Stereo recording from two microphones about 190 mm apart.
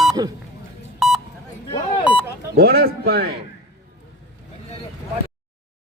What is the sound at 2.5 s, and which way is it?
Speech, 55° right (ahead or behind).